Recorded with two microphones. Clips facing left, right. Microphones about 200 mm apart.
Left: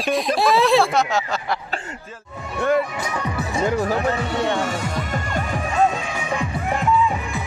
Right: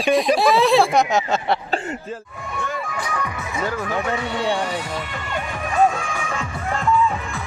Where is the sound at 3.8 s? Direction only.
35° left (ahead or behind).